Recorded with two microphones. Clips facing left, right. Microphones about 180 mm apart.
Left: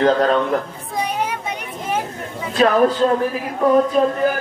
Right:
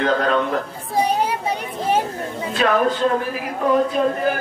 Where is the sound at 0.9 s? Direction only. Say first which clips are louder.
Right 3 dB; 30° right (ahead or behind).